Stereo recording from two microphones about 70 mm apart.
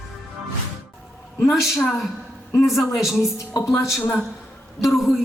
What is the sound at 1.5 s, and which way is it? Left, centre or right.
A man's voice, centre.